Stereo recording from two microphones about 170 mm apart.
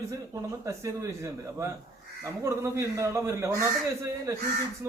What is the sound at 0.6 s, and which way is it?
A man's voice, 15° right (ahead or behind).